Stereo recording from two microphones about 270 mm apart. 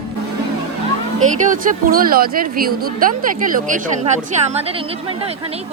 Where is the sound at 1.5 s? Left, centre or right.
Right.